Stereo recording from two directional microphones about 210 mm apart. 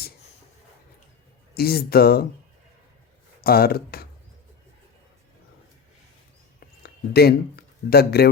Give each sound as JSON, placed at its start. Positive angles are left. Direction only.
{"t": 1.5, "sound": "speech", "side_deg": 45}
{"t": 3.4, "sound": "speech", "side_deg": 45}
{"t": 6.6, "sound": "a sound", "side_deg": 50}